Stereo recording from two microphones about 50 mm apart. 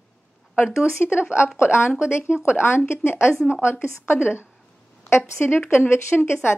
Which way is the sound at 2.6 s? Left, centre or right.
Left.